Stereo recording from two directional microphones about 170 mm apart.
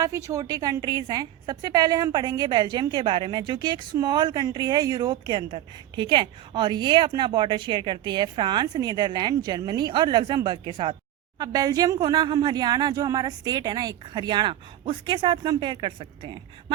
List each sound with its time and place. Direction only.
0.0 s a woman's voice: 20° right (ahead or behind)